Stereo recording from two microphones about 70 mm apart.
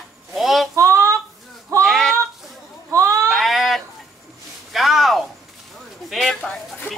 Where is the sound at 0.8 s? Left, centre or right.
Right.